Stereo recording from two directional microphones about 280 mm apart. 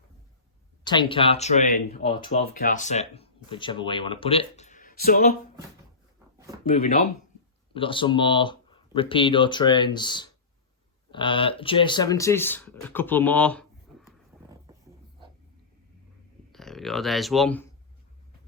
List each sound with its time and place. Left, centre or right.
0.9 s speech: centre; by 5.4 s left
6.7 s speech: left; by 13.7 s centre
16.5 s speech: centre